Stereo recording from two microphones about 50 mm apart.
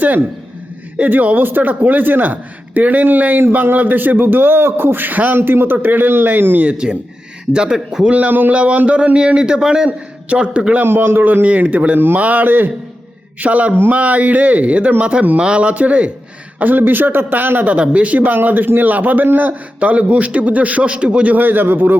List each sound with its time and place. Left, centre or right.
0.9 s a man's voice: right
6.7 s a man's voice: centre
8.1 s a man's voice: right
10.8 s a man's voice: right
11.4 s a man's voice: right
11.9 s a man's voice: right
13.4 s a man's voice: right
16.6 s a man's voice: right
21.3 s a man's voice: right